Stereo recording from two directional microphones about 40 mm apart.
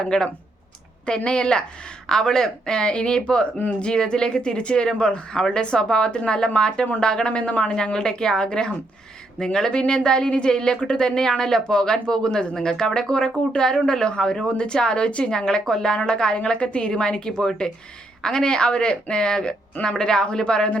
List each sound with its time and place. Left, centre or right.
0.0 s speech: centre